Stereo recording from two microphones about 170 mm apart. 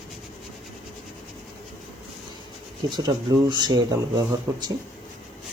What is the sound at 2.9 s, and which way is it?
Speech, 25° right (ahead or behind).